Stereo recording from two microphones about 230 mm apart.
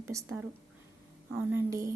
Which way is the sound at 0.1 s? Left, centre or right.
Centre.